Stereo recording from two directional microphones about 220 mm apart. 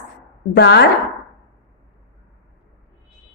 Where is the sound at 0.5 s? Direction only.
50° left (ahead or behind).